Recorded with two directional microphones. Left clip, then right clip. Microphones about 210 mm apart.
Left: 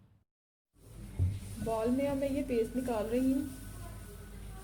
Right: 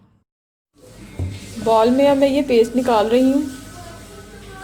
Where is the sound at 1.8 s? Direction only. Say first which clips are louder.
Right 18 dB; 30° right (ahead or behind).